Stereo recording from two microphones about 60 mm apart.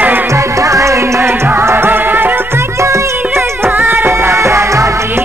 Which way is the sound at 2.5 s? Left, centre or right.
Right.